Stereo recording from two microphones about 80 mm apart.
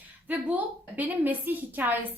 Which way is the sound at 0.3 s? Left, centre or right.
Right.